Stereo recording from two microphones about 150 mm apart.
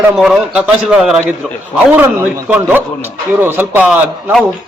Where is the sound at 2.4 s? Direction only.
10° right (ahead or behind).